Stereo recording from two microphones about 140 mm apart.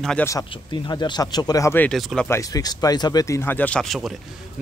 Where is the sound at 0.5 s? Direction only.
30° left (ahead or behind); by 1.9 s 15° left (ahead or behind).